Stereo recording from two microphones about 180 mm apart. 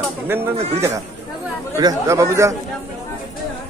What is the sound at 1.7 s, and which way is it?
Speech, 20° right (ahead or behind).